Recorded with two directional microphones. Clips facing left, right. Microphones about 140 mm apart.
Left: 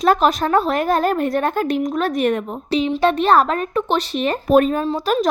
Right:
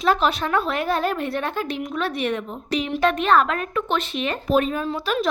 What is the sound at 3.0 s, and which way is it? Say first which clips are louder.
Speech: left 2 dB; 30° left (ahead or behind).